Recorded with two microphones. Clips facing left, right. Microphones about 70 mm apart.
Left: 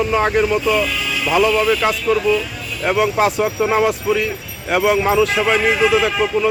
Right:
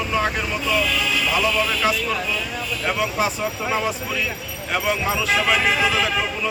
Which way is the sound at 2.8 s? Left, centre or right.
Left.